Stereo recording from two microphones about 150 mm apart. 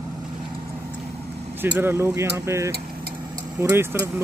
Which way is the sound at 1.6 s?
15° right (ahead or behind).